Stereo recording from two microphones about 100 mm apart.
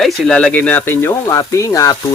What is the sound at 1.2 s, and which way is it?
Speech, 35° left (ahead or behind).